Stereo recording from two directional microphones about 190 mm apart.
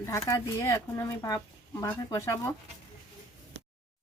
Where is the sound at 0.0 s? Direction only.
15° left (ahead or behind).